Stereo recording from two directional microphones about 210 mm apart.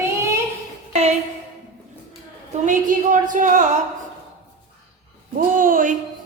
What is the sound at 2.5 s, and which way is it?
A woman's voice, 35° right (ahead or behind).